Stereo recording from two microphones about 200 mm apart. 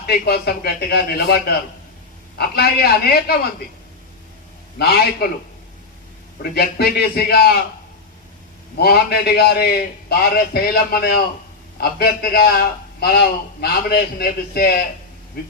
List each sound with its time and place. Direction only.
0.0 s a man's voice: 50° left (ahead or behind)
2.4 s a man's voice: 50° left (ahead or behind)
4.8 s a man's voice: 55° left (ahead or behind)
6.5 s a man's voice: 50° left (ahead or behind)
8.8 s a man's voice: 50° left (ahead or behind)